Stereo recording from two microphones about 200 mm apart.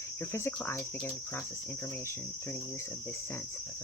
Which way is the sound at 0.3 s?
15° left (ahead or behind).